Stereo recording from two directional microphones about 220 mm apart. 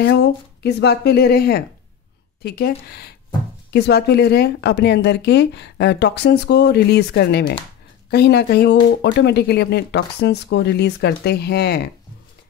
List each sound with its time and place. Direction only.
0.0 s speech: 50° left (ahead or behind)